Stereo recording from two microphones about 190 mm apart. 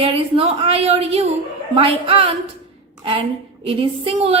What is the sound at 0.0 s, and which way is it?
A woman's voice, 30° right (ahead or behind).